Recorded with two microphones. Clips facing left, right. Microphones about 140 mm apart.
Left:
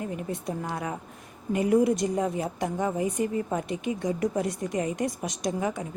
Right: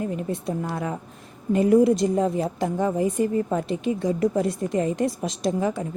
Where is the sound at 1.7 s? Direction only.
25° right (ahead or behind).